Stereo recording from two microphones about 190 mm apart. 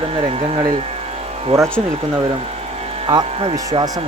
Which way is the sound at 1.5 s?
15° right (ahead or behind).